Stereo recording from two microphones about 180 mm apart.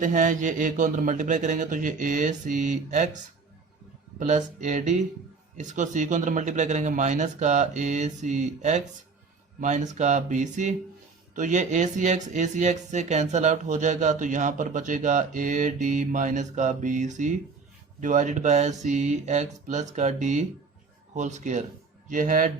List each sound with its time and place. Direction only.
0.0 s speech: 45° right (ahead or behind)
4.2 s speech: 40° right (ahead or behind)